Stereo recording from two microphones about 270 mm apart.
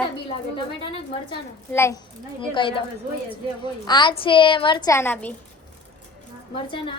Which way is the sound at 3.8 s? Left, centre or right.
Centre.